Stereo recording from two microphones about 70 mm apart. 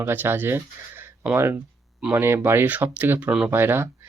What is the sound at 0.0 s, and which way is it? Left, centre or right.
Speech, right.